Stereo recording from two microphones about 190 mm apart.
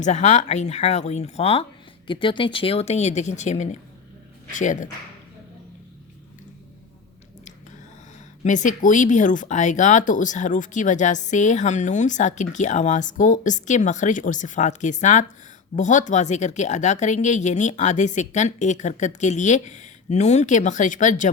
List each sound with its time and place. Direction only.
0.0 s speech: 40° left (ahead or behind)
8.4 s speech: 40° left (ahead or behind)